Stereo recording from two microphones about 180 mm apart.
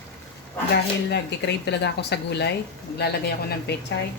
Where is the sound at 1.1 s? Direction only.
70° left (ahead or behind).